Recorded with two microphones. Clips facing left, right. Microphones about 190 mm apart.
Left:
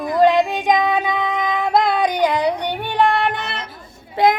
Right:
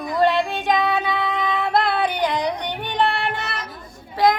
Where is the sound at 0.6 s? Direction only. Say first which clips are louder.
Left 3 dB; 15° left (ahead or behind).